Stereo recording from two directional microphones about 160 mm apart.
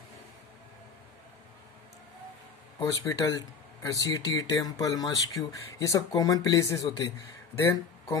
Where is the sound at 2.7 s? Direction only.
25° left (ahead or behind).